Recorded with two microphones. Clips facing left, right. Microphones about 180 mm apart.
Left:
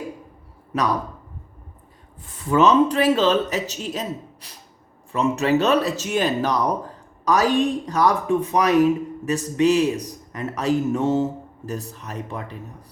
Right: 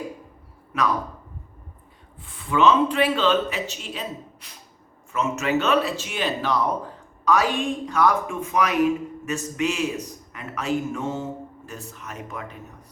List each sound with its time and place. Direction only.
2.2 s speech: 40° left (ahead or behind)